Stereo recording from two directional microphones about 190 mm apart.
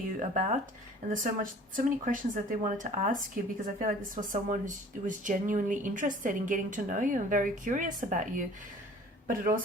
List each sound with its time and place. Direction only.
0.2 s speech: 40° right (ahead or behind)